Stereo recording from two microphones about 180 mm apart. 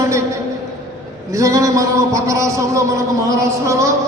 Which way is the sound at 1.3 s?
15° right (ahead or behind).